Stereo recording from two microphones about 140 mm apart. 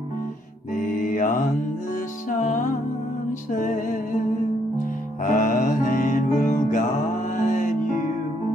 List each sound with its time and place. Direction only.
2.2 s music: 65° left (ahead or behind)
5.2 s music: 70° left (ahead or behind)